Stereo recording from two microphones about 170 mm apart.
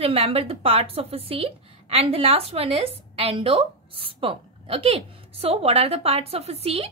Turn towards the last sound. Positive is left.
turn(degrees=-35)  # may be behind; listen again after turning